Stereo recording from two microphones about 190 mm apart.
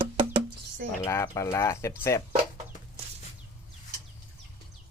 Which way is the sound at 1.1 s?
15° left (ahead or behind).